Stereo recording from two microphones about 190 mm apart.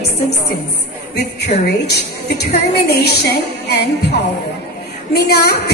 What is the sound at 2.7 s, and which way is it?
A woman's voice, 60° left (ahead or behind).